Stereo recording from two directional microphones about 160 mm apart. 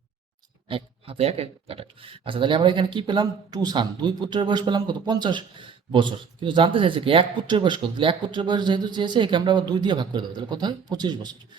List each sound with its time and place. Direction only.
0.7 s speech: 35° right (ahead or behind)